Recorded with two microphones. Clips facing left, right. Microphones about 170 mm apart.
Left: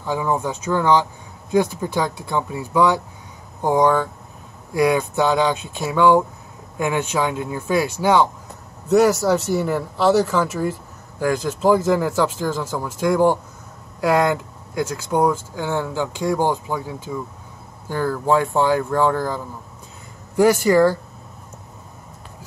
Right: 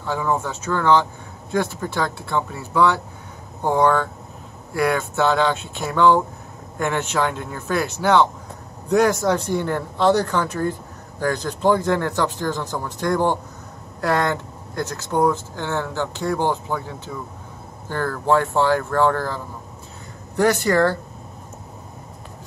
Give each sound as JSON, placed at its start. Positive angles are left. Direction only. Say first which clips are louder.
{"t": 0.0, "sound": "a man's voice", "louder": "left 1 dB", "side_deg": 15}